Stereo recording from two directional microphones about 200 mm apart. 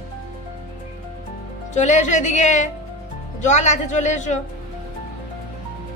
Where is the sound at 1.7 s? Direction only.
35° left (ahead or behind).